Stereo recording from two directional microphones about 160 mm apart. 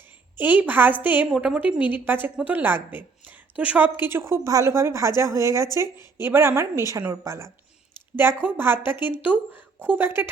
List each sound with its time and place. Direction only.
0.3 s a woman's voice: 10° right (ahead or behind)